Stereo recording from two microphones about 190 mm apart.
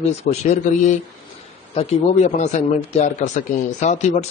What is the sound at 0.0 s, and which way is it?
Speech, 35° left (ahead or behind).